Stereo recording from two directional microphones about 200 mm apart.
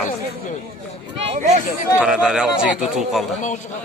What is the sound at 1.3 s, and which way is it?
Speech, 40° right (ahead or behind).